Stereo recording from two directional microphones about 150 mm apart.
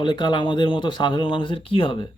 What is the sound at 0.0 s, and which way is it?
Speech, 30° left (ahead or behind).